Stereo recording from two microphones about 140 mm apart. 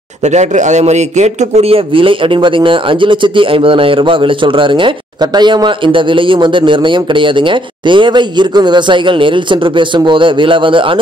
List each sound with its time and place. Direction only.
0.2 s speech: 55° right (ahead or behind); by 11.0 s 35° right (ahead or behind)